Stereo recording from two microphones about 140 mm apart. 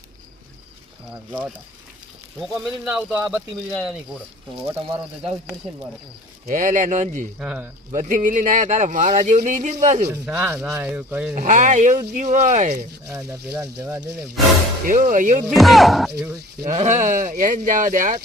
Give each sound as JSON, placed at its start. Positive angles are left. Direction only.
{"t": 1.1, "sound": "speech", "side_deg": -5}
{"t": 4.8, "sound": "speech", "side_deg": -40}
{"t": 6.4, "sound": "speech", "side_deg": -65}
{"t": 7.3, "sound": "speech", "side_deg": -10}
{"t": 7.9, "sound": "speech", "side_deg": -65}
{"t": 10.2, "sound": "speech", "side_deg": -10}
{"t": 11.3, "sound": "speech", "side_deg": -65}
{"t": 13.1, "sound": "speech", "side_deg": -20}
{"t": 14.8, "sound": "speech", "side_deg": -70}
{"t": 15.4, "sound": "speech", "side_deg": 0}
{"t": 16.7, "sound": "speech", "side_deg": -60}